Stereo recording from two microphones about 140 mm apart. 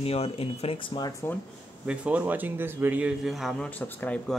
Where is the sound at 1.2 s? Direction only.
15° left (ahead or behind).